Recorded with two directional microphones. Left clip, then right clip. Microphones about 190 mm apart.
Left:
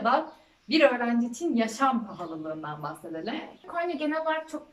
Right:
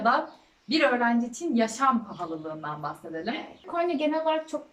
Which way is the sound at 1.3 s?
5° left (ahead or behind).